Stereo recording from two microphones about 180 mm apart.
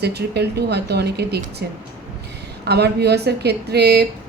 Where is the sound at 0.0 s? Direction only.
65° right (ahead or behind).